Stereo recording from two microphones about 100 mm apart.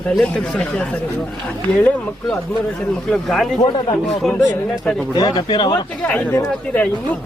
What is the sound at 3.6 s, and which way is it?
Speech, 50° left (ahead or behind).